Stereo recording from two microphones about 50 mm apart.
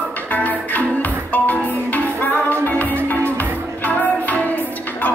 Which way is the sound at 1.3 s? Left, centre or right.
Left.